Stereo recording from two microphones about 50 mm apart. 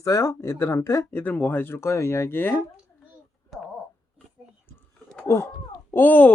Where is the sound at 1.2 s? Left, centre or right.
Left.